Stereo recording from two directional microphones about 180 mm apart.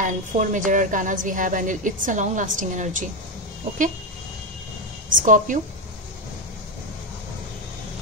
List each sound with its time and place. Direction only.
0.0 s a woman's voice: 45° right (ahead or behind)
5.1 s a woman's voice: 45° right (ahead or behind)